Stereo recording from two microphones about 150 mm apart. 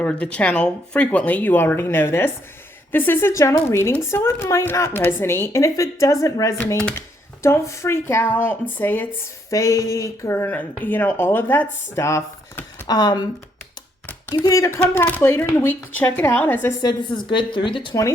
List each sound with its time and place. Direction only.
0.0 s speech: 10° left (ahead or behind)
12.9 s speech: 25° left (ahead or behind)
14.3 s speech: 20° left (ahead or behind)
16.8 s speech: 30° left (ahead or behind)